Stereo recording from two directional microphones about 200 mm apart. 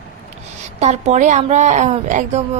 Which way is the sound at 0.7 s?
35° right (ahead or behind).